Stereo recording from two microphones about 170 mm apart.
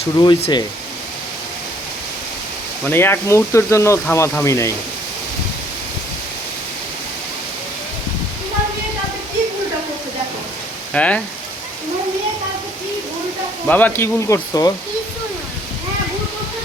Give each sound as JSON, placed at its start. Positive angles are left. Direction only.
{"t": 0.2, "sound": "speech", "side_deg": 25}
{"t": 2.8, "sound": "speech", "side_deg": 15}
{"t": 10.9, "sound": "speech", "side_deg": 5}
{"t": 13.7, "sound": "speech", "side_deg": 10}